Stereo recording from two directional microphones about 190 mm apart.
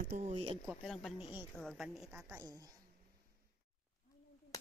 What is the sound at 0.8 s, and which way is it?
Speech, 5° left (ahead or behind).